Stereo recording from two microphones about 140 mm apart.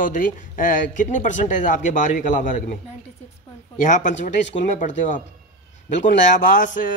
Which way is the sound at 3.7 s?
65° left (ahead or behind).